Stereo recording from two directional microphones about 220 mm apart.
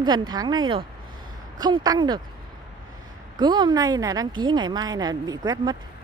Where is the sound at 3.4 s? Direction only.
20° right (ahead or behind).